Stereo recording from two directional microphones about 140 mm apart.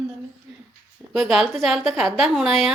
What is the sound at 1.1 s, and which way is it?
A woman's voice, centre (ahead or behind).